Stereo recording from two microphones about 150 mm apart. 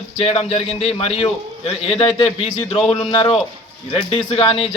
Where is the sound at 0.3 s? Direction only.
40° left (ahead or behind).